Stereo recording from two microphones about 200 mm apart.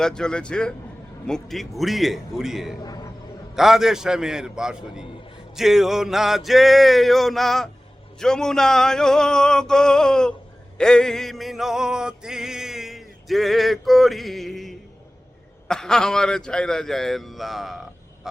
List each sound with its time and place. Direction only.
0.0 s music: 5° left (ahead or behind)
2.8 s a sound: 20° left (ahead or behind)
3.5 s music: centre (ahead or behind)